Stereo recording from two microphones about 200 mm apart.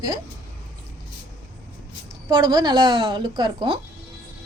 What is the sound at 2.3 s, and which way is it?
Speech, 20° right (ahead or behind).